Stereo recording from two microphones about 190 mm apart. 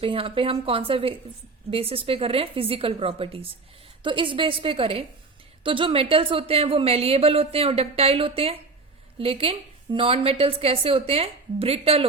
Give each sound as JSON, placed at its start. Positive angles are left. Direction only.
{"t": 0.0, "sound": "a woman's voice", "side_deg": -30}